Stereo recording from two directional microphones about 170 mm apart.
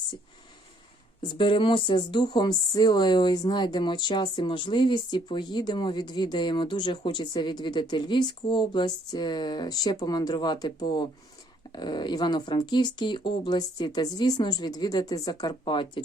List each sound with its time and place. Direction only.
1.3 s speech: 30° left (ahead or behind)